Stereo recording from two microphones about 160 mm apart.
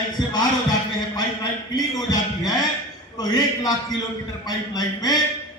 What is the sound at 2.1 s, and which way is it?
A man's voice, 25° left (ahead or behind).